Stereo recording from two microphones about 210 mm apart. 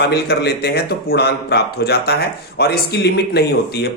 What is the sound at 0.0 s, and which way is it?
Speech, 50° left (ahead or behind).